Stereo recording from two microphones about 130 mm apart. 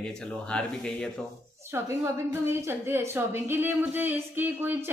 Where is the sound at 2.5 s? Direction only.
20° right (ahead or behind).